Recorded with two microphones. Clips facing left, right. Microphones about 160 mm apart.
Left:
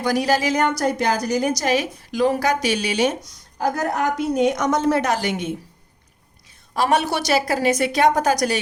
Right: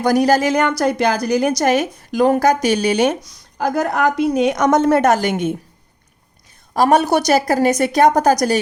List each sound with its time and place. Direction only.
0.0 s a woman's voice: 45° right (ahead or behind)
3.6 s a woman's voice: 80° right; by 5.5 s 50° right (ahead or behind)
6.7 s a woman's voice: 45° right (ahead or behind)